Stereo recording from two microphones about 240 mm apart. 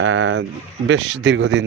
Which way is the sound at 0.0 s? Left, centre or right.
Right.